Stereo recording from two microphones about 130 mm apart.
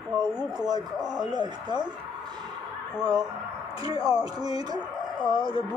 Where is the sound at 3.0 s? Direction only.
30° right (ahead or behind).